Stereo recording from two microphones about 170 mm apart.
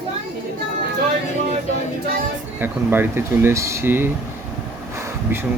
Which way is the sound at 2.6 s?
10° right (ahead or behind).